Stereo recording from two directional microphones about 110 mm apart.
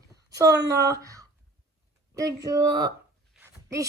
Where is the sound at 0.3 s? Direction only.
30° right (ahead or behind).